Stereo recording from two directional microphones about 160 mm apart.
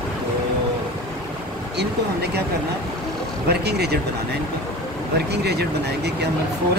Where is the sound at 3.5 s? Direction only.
90° right.